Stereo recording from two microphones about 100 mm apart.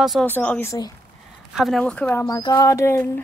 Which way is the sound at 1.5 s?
Centre (ahead or behind).